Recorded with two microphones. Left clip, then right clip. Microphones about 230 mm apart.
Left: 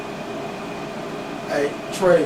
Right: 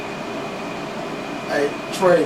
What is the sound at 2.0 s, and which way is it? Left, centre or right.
Speech, centre.